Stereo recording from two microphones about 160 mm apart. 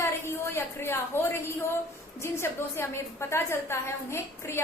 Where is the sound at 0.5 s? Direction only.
15° left (ahead or behind).